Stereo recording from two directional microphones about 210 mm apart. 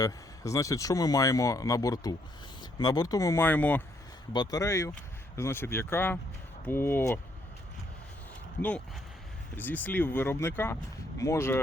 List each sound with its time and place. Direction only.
0.0 s speech: 15° left (ahead or behind)
4.3 s speech: 20° left (ahead or behind)
9.6 s speech: 10° left (ahead or behind)